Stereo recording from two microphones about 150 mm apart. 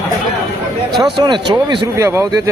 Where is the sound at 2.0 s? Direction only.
20° right (ahead or behind).